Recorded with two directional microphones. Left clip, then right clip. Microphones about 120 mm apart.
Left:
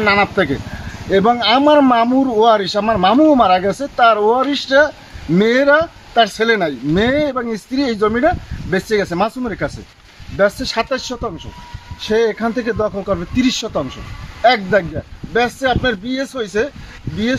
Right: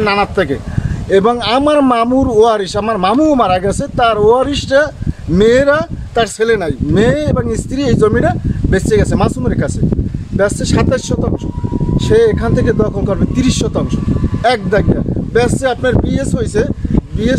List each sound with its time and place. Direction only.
0.0 s speech: 40° right (ahead or behind)